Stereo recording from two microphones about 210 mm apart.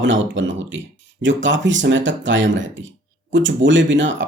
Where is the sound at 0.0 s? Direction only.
60° right (ahead or behind).